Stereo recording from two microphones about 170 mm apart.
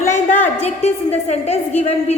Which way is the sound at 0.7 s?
40° left (ahead or behind).